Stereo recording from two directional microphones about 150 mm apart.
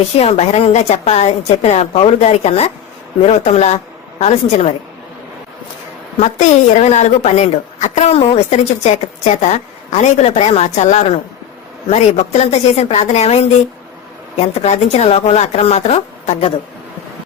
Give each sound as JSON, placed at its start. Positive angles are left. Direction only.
{"t": 0.2, "sound": "a woman's voice", "side_deg": 45}
{"t": 6.1, "sound": "a woman's voice", "side_deg": 50}
{"t": 14.6, "sound": "a woman's voice", "side_deg": 45}